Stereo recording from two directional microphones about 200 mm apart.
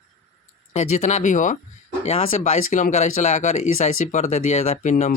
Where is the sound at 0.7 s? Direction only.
35° left (ahead or behind).